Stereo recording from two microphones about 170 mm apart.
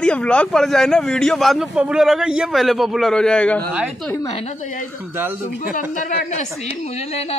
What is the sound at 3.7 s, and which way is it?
Speech, 5° right (ahead or behind).